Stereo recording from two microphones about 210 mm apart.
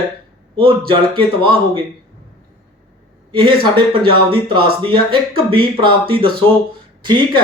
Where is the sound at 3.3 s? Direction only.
25° right (ahead or behind).